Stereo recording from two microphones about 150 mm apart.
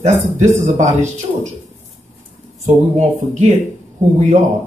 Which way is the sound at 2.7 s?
55° right (ahead or behind).